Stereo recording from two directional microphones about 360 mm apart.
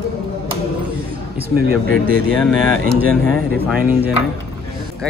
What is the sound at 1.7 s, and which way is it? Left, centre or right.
Speech, right.